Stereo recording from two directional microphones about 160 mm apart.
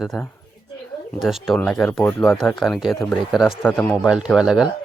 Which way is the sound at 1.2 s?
Centre (ahead or behind).